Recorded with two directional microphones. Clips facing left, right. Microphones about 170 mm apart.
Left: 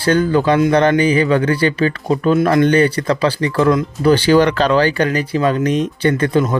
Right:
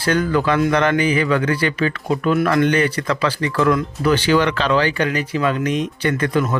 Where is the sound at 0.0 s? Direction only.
30° left (ahead or behind).